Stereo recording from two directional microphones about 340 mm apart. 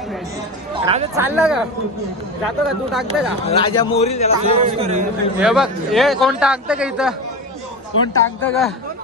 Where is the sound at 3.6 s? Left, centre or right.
Centre.